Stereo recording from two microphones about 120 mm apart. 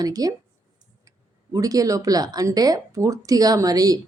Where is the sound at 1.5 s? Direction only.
30° right (ahead or behind).